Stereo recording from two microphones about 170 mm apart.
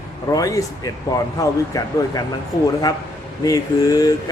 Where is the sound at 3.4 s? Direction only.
20° left (ahead or behind).